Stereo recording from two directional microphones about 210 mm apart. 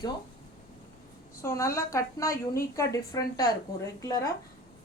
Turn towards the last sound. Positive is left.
turn(degrees=15)  # may be behind; listen again after turning